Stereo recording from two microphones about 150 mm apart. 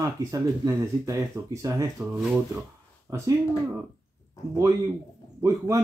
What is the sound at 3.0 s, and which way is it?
Speech, 20° right (ahead or behind).